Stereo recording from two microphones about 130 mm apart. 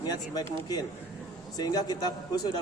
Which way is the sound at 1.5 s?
30° left (ahead or behind).